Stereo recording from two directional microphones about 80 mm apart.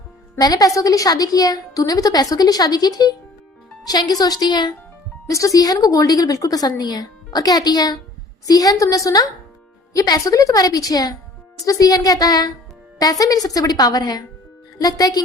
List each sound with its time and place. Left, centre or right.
0.3 s a woman's voice: left
5.3 s a woman's voice: left